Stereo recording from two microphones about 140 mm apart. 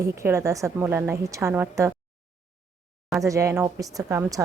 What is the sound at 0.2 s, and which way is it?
A woman's voice, 20° right (ahead or behind).